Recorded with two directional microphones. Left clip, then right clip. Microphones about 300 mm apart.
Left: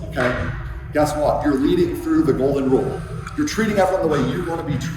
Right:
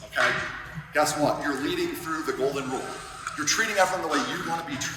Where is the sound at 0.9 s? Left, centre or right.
Centre.